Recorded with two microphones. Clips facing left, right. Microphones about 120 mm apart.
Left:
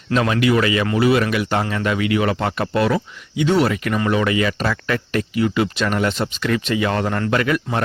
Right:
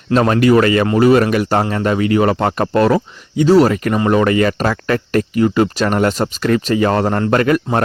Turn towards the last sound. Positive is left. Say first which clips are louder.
# right 6 dB
turn(degrees=-45)  # may be behind; listen again after turning